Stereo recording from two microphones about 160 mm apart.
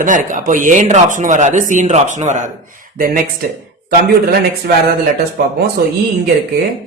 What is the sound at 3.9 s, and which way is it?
A man's voice, 80° right.